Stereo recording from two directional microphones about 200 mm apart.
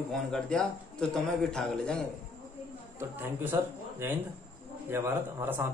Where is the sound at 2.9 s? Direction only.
10° right (ahead or behind).